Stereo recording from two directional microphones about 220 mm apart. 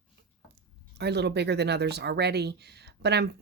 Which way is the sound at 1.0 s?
50° right (ahead or behind).